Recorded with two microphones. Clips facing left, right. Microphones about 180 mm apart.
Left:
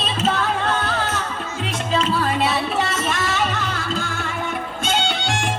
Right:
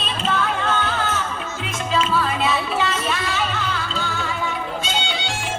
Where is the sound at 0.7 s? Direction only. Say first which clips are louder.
Even; 40° left (ahead or behind).